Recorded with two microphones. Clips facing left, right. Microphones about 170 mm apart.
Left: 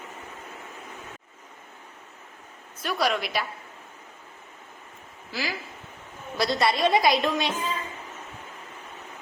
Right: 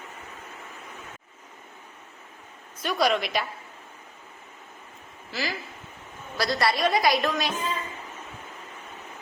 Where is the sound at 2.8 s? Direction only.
5° left (ahead or behind).